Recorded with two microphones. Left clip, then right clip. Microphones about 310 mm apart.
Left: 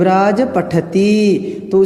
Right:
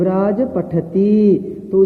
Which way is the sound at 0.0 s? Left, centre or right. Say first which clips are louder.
Left 5 dB; left.